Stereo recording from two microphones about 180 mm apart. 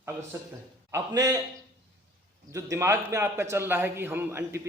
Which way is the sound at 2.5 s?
15° right (ahead or behind).